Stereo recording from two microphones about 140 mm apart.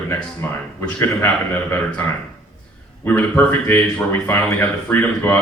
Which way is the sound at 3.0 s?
15° left (ahead or behind).